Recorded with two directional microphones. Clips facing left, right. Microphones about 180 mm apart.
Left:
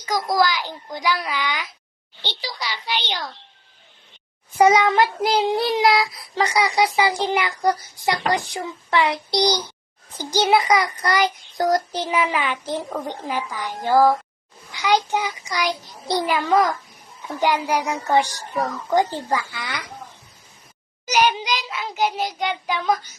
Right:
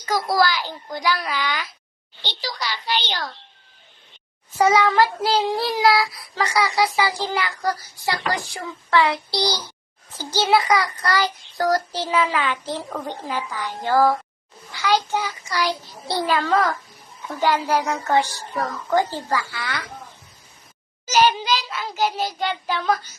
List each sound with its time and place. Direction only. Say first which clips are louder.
0.3 s a child's voice: left 1 dB; 15° left (ahead or behind)
2.4 s a child's voice: right 3 dB; centre (ahead or behind)
4.5 s child singing: left 2 dB; 20° left (ahead or behind)
10.2 s a child's voice: left 1 dB; 15° left (ahead or behind)
21.1 s a child's voice: right 1 dB; 15° left (ahead or behind)